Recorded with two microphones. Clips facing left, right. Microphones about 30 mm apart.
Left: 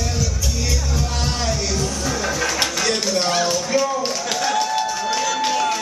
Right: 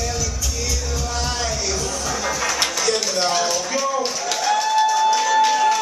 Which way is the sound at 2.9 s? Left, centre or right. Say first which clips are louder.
Even; centre.